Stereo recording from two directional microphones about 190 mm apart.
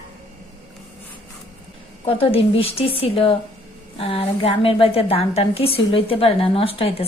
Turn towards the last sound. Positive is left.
turn(degrees=30)  # may be behind; listen again after turning